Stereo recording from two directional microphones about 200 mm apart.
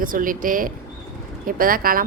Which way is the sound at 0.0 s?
45° right (ahead or behind).